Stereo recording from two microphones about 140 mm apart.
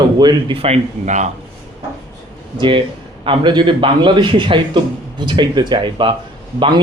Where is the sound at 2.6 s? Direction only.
35° right (ahead or behind).